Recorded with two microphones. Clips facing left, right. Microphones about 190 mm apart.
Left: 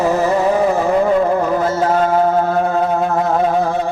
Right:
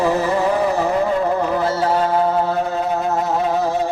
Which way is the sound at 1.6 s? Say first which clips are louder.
Left 2 dB; 45° left (ahead or behind).